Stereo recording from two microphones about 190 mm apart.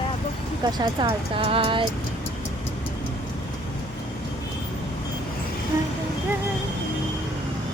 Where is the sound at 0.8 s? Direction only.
25° right (ahead or behind).